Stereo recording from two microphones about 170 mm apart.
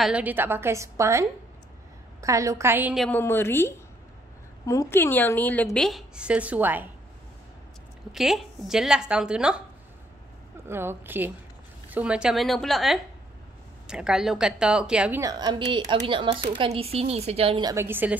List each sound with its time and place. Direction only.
0.0 s a woman's voice: 10° right (ahead or behind)
2.2 s a woman's voice: 20° right (ahead or behind)
3.1 s a woman's voice: 15° left (ahead or behind); by 6.9 s 10° right (ahead or behind)
8.1 s a woman's voice: centre (ahead or behind)
10.7 s a woman's voice: 15° right (ahead or behind)
15.2 s a woman's voice: 25° right (ahead or behind)
17.6 s a woman's voice: 15° right (ahead or behind)